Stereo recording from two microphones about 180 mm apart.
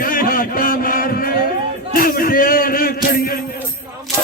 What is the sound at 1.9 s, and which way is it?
Music, 55° left (ahead or behind).